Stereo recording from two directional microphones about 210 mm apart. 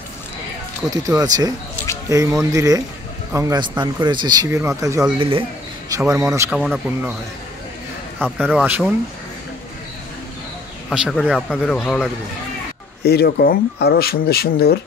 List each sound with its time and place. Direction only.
0.8 s speech: 15° right (ahead or behind)
6.5 s a man's voice: centre (ahead or behind)
8.2 s speech: 10° right (ahead or behind)
10.9 s a man's voice: centre (ahead or behind)
13.0 s speech: 50° left (ahead or behind)